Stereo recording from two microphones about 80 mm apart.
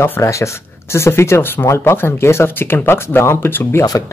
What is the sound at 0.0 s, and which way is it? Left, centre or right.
Speech, left.